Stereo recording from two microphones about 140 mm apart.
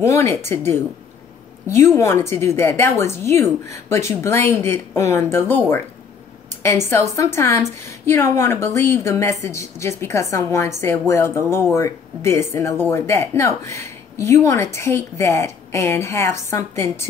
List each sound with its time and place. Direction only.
0.0 s a woman's voice: 20° left (ahead or behind)
2.0 s a woman's voice: 20° left (ahead or behind)